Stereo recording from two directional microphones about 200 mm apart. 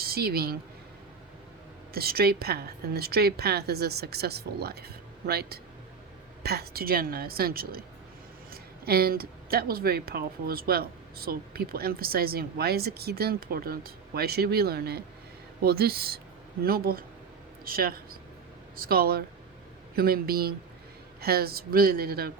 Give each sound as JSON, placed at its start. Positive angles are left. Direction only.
{"t": 0.0, "sound": "speech", "side_deg": -50}
{"t": 1.9, "sound": "speech", "side_deg": -50}